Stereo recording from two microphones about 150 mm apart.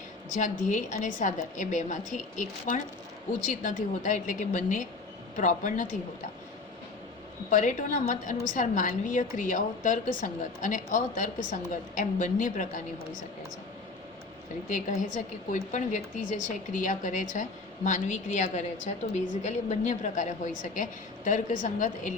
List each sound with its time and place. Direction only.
0.3 s a woman's voice: 55° left (ahead or behind)
7.5 s a woman's voice: 55° left (ahead or behind)
14.7 s a woman's voice: 55° left (ahead or behind)